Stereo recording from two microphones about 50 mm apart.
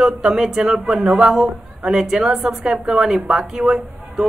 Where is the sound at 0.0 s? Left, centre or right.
Centre.